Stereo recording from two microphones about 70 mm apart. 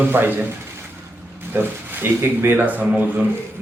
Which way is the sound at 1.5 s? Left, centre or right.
Right.